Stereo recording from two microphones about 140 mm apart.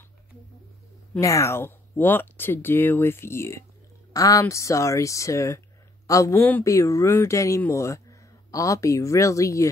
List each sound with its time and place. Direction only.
1.2 s speech: 20° left (ahead or behind)